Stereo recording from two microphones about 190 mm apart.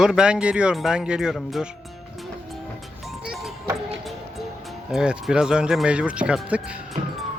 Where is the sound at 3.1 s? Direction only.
Centre (ahead or behind).